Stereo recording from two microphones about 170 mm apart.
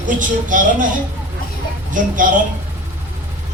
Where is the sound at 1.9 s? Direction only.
50° right (ahead or behind).